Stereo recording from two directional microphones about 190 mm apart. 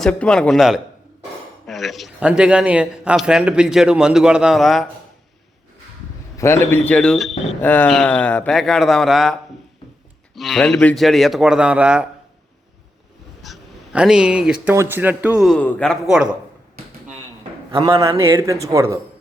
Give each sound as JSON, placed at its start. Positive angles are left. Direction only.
{"t": 0.0, "sound": "a man's voice", "side_deg": 5}
{"t": 6.3, "sound": "a man's voice", "side_deg": 15}
{"t": 13.4, "sound": "a man's voice", "side_deg": 0}
{"t": 17.7, "sound": "a man's voice", "side_deg": -25}
{"t": 18.2, "sound": "speech", "side_deg": -15}